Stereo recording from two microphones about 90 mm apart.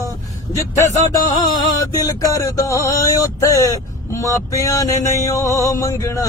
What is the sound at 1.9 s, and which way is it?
Speech, 40° left (ahead or behind).